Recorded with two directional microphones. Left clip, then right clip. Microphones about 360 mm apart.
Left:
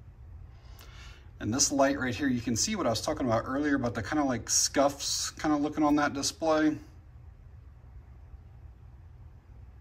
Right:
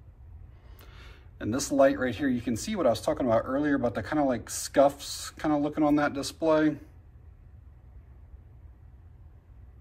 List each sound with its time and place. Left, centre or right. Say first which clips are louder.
0.7 s speech: left 1 dB; centre